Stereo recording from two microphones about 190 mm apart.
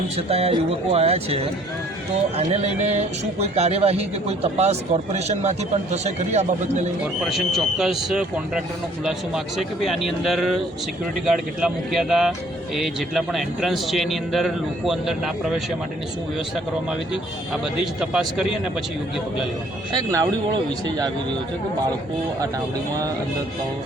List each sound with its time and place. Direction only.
0.2 s a man's voice: 30° right (ahead or behind)
7.3 s a man's voice: centre (ahead or behind)
18.0 s a man's voice: 5° right (ahead or behind)
19.9 s speech: 20° right (ahead or behind)